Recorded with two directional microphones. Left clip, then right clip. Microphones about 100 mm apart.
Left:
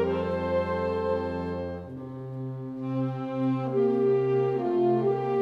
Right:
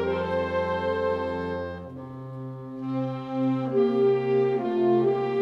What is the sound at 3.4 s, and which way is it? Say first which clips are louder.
Music: right 3 dB; centre (ahead or behind).